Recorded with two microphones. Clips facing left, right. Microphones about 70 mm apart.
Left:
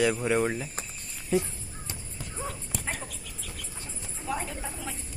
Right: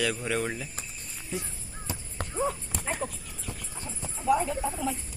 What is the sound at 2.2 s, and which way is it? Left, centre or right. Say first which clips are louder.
Clip-clop: right 6 dB; right.